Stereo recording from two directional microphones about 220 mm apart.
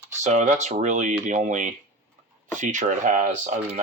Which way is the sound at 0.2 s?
35° right (ahead or behind).